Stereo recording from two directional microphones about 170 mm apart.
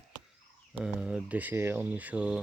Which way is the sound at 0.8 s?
5° right (ahead or behind).